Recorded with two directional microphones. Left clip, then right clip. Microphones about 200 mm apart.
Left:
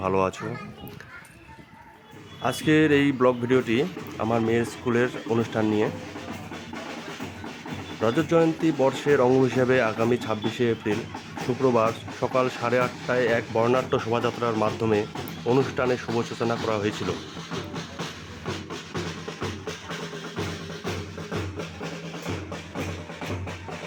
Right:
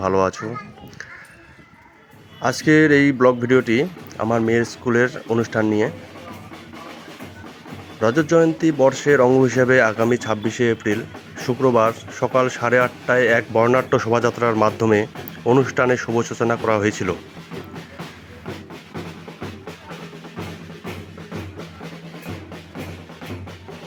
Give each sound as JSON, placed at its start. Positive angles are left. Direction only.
{"t": 0.0, "sound": "speech", "side_deg": -15}
{"t": 2.4, "sound": "speech", "side_deg": -15}
{"t": 8.0, "sound": "speech", "side_deg": -15}